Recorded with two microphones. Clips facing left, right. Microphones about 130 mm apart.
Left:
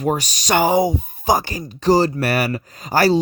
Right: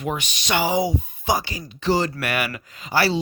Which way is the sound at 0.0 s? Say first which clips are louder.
Left 6 dB; 40° left (ahead or behind).